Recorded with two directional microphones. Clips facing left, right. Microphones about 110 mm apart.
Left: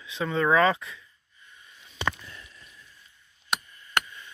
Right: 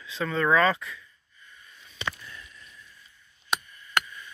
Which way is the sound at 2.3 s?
25° left (ahead or behind).